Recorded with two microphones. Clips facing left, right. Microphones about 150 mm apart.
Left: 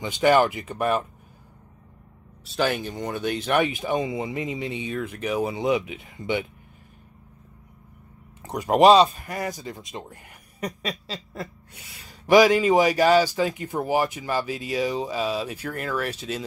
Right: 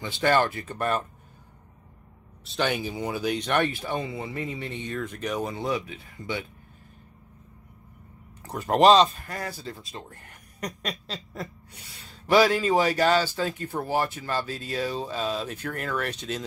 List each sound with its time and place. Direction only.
0.0 s speech: 15° left (ahead or behind)
2.5 s speech: centre (ahead or behind); by 6.4 s 20° left (ahead or behind)
8.4 s a sound: 20° left (ahead or behind)
8.6 s speech: 10° left (ahead or behind)